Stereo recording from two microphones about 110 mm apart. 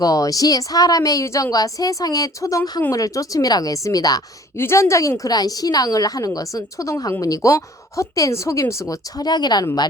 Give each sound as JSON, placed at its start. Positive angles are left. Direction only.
{"t": 0.0, "sound": "a woman's voice", "side_deg": 35}
{"t": 4.5, "sound": "a woman's voice", "side_deg": 25}